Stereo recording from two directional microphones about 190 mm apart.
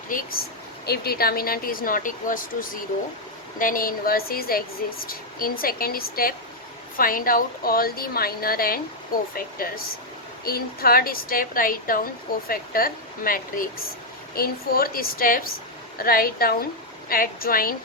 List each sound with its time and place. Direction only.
0.1 s a woman's voice: 50° left (ahead or behind)